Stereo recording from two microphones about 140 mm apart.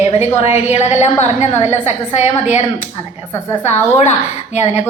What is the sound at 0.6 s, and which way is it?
A woman's voice, 55° left (ahead or behind).